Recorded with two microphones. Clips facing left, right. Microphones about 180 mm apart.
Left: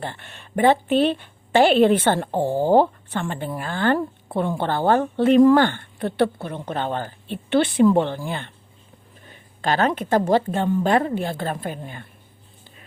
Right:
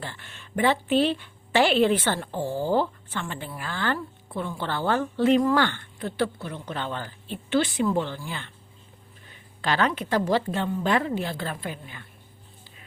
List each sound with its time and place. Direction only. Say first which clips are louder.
0.0 s a woman's voice: left 6 dB; 55° left (ahead or behind)